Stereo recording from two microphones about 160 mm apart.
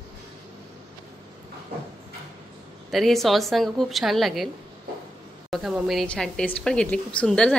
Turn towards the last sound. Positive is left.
turn(degrees=5)  # may be behind; listen again after turning